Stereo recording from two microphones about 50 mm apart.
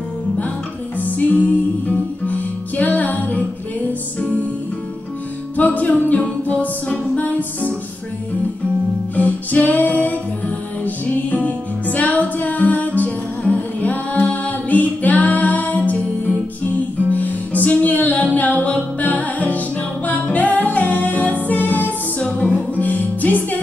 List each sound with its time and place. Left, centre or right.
0.9 s music: left
5.6 s a capella: left
9.1 s music: left
17.1 s music: left